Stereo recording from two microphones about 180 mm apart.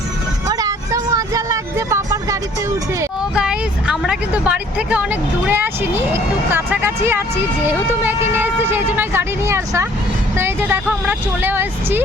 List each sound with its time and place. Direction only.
0.4 s vehicle: 20° right (ahead or behind)
3.3 s speech: 5° right (ahead or behind)